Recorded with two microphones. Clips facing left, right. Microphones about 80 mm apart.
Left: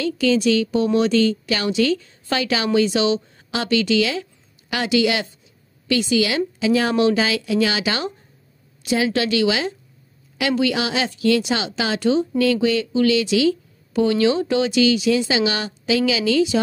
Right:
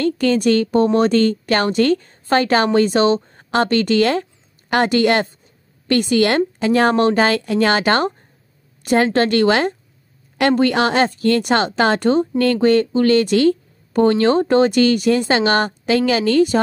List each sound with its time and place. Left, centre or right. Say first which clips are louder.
0.0 s a woman's voice: right 2 dB; right